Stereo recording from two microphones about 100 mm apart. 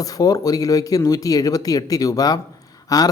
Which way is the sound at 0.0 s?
35° left (ahead or behind).